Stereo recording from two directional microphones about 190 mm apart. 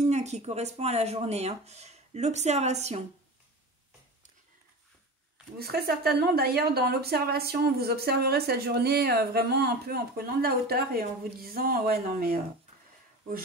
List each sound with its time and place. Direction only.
0.0 s speech: 35° right (ahead or behind)
5.6 s speech: 55° right (ahead or behind)